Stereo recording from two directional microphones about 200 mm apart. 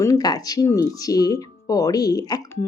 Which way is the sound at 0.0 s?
20° left (ahead or behind).